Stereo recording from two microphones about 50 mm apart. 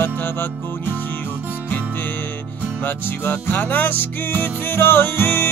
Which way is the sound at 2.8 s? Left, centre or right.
Left.